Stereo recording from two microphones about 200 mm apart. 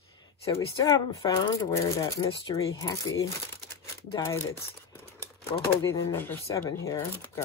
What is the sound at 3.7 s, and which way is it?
Crumpling, 15° left (ahead or behind).